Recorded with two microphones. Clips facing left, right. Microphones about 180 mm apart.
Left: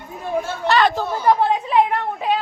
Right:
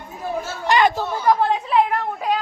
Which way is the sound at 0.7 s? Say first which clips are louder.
Even; 15° right (ahead or behind).